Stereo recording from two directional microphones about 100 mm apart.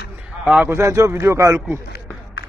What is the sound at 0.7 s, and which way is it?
Speech, 30° right (ahead or behind).